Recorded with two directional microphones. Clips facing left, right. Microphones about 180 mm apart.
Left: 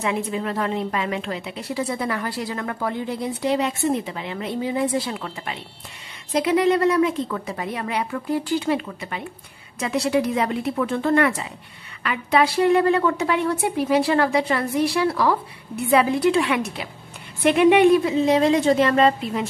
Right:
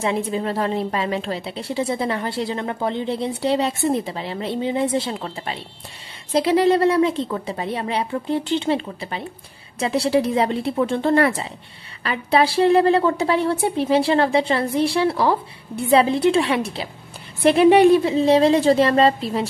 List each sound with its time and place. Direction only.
0.0 s a woman's voice: 30° right (ahead or behind)